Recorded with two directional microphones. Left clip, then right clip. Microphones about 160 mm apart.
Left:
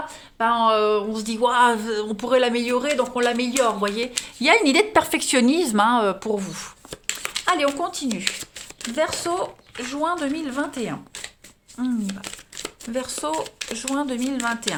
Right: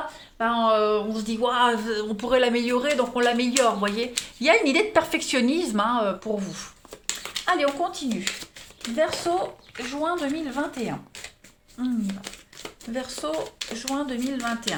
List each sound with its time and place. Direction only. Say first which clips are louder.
0.3 s speech: left 3 dB; 40° left (ahead or behind)